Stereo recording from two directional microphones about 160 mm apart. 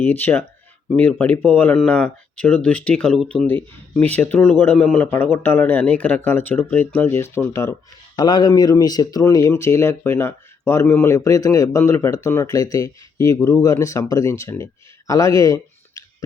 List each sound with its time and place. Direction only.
0.0 s speech: 10° left (ahead or behind)